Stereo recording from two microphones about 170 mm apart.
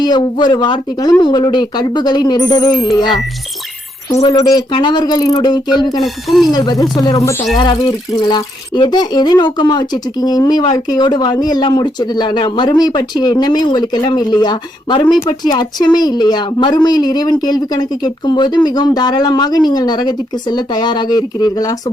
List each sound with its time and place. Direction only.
0.0 s speech: 25° left (ahead or behind)
4.3 s speech: 20° left (ahead or behind)
6.0 s speech: centre (ahead or behind)
6.5 s speech: 25° left (ahead or behind)